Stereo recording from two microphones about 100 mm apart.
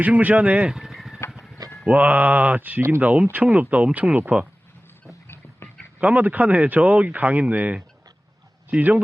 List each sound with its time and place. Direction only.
0.0 s speech: 15° right (ahead or behind)
1.9 s speech: 15° right (ahead or behind)
6.0 s speech: 15° right (ahead or behind)